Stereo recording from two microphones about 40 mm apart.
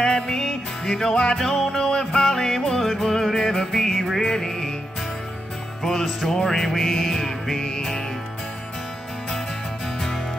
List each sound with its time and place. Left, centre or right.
0.0 s music: centre
6.3 s music: centre